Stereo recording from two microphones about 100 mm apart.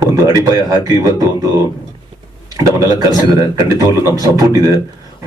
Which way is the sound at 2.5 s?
35° right (ahead or behind).